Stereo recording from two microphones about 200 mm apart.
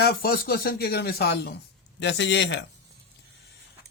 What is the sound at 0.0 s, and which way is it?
A man's voice, 50° left (ahead or behind).